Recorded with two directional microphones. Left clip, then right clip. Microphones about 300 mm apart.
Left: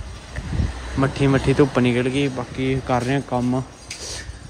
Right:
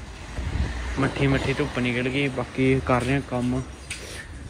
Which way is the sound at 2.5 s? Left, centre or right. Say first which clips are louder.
Right 2 dB; centre.